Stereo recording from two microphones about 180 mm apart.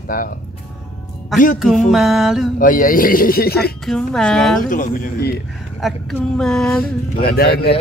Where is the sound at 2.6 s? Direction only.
50° left (ahead or behind).